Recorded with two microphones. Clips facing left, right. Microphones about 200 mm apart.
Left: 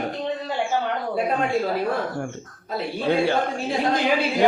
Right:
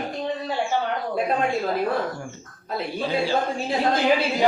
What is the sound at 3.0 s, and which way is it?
Speech, 65° left (ahead or behind).